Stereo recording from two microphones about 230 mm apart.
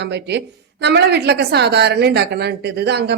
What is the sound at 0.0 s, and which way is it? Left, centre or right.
A woman's voice, right.